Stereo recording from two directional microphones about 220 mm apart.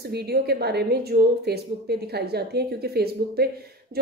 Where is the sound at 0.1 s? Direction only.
45° right (ahead or behind).